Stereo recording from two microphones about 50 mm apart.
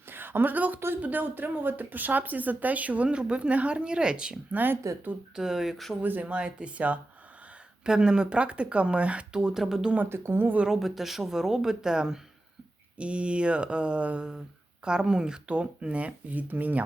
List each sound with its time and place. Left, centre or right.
0.1 s a woman's voice: right; by 4.4 s centre
4.5 s speech: right
5.3 s speech: centre
6.0 s speech: right
6.3 s speech: right
7.9 s speech: centre
10.1 s speech: right
10.7 s speech: centre
13.0 s speech: right
14.8 s speech: centre; by 16.8 s right